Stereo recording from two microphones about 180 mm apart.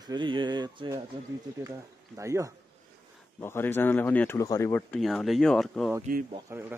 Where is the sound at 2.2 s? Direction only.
15° right (ahead or behind).